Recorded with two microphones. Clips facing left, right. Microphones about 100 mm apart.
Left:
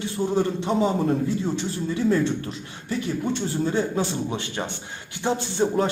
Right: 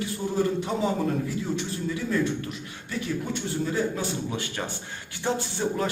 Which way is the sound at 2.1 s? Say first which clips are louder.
Left 5 dB; 30° left (ahead or behind).